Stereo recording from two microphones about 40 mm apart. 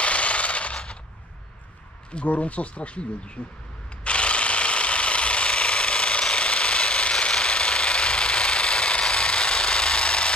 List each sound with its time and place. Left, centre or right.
0.0 s machine gun: left
2.2 s speech: left
4.0 s a sound: left